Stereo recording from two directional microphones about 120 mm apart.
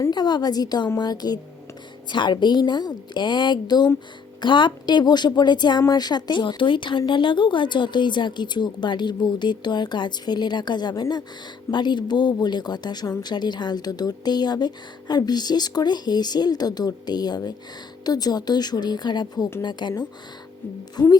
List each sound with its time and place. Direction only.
0.1 s speech: 35° left (ahead or behind)